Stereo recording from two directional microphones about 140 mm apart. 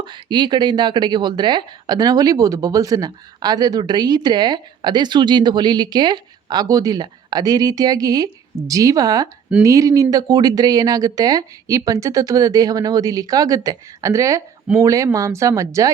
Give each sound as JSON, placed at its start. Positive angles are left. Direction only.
{"t": 0.0, "sound": "speech", "side_deg": -35}